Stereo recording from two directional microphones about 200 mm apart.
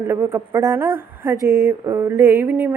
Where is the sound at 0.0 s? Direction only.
10° right (ahead or behind).